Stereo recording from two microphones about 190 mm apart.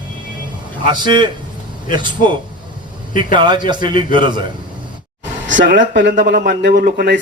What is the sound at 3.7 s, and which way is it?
Speech, 25° right (ahead or behind).